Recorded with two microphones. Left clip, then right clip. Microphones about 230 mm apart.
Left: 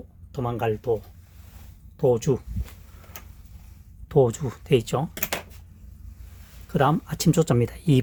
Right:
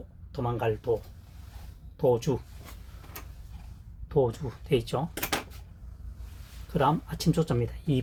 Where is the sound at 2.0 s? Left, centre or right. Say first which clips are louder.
Left 4 dB; left.